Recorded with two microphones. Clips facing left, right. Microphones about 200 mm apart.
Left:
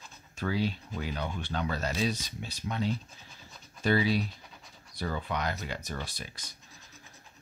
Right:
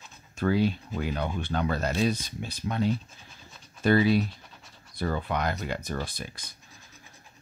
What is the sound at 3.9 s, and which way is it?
Speech, 50° right (ahead or behind).